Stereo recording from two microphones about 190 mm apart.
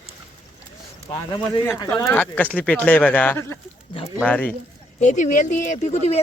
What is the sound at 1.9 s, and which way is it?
Speech, 10° left (ahead or behind).